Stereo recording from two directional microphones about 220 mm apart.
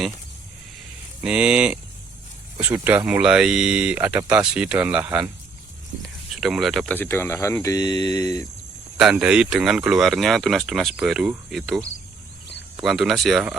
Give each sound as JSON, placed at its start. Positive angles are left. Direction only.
{"t": 1.2, "sound": "speech", "side_deg": -5}
{"t": 9.0, "sound": "speech", "side_deg": -5}